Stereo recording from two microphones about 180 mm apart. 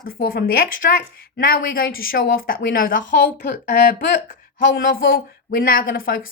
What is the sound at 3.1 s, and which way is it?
Speech, 60° left (ahead or behind).